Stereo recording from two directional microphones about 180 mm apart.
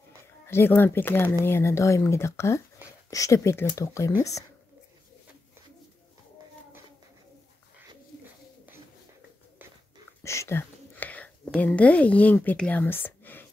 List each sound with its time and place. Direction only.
0.5 s speech: 10° left (ahead or behind)
10.2 s speech: 15° left (ahead or behind)